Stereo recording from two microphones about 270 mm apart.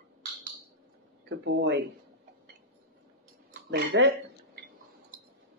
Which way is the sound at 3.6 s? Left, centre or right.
Right.